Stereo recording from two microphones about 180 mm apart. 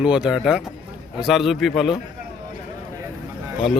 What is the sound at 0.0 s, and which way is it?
Speech, 5° right (ahead or behind).